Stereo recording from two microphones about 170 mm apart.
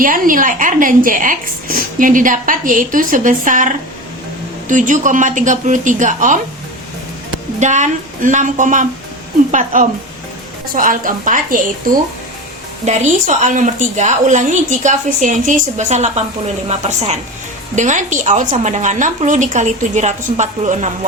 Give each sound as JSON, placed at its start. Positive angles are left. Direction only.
{"t": 0.0, "sound": "a woman's voice", "side_deg": -55}
{"t": 7.6, "sound": "a woman's voice", "side_deg": -45}
{"t": 12.8, "sound": "a woman's voice", "side_deg": -45}